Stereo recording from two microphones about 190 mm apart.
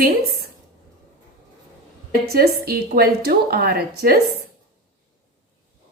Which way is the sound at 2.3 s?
55° right (ahead or behind).